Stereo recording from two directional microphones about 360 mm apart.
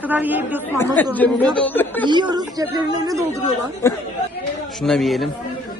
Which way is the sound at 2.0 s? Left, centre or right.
Centre.